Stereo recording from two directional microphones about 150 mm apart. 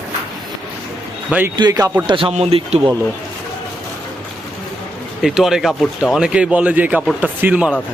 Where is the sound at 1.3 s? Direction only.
10° right (ahead or behind).